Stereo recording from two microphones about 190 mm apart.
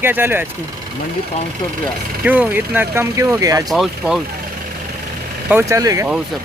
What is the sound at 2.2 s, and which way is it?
Speech, 10° right (ahead or behind).